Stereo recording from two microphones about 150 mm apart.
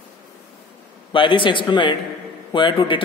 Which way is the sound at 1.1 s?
35° left (ahead or behind).